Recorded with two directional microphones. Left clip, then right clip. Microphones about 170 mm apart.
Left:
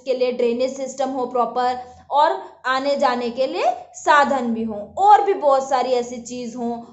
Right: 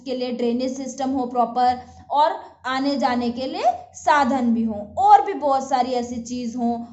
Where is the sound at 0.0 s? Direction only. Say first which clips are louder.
Left 5 dB; 20° right (ahead or behind).